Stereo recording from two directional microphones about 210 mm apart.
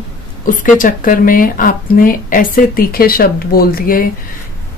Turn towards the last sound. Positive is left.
turn(degrees=45)  # may be behind; listen again after turning